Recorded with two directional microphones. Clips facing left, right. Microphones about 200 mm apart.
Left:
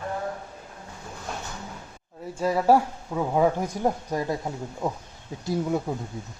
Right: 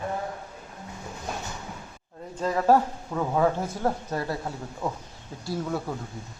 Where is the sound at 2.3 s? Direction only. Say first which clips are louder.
Left 1 dB; 10° left (ahead or behind).